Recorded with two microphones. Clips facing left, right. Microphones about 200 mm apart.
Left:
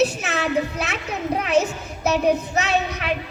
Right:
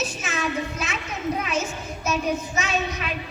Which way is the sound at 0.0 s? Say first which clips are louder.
Left 7 dB; 65° left (ahead or behind).